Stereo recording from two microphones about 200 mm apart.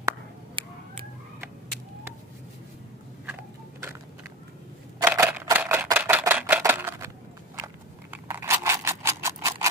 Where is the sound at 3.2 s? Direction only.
10° right (ahead or behind).